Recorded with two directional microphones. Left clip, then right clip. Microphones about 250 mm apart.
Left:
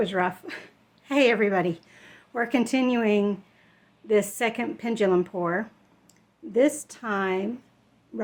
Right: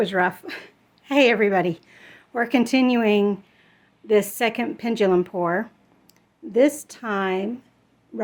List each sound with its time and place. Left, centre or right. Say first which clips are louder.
0.0 s a woman's voice: right 4 dB; centre